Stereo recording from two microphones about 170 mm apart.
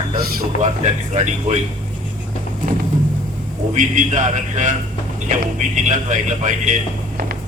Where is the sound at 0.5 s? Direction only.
50° left (ahead or behind).